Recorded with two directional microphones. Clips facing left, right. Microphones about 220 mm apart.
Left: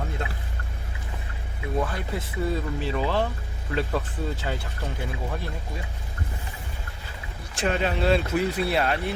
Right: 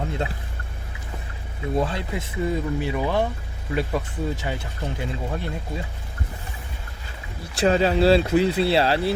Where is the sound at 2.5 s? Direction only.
15° right (ahead or behind).